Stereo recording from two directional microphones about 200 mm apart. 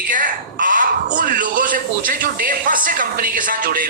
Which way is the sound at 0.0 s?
40° right (ahead or behind).